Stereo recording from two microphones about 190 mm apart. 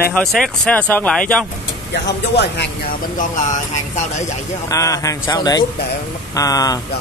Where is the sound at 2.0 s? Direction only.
65° left (ahead or behind).